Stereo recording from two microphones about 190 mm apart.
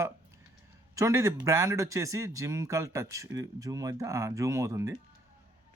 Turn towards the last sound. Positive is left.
turn(degrees=-15)  # may be behind; listen again after turning